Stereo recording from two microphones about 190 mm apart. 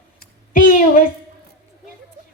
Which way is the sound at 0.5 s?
45° left (ahead or behind).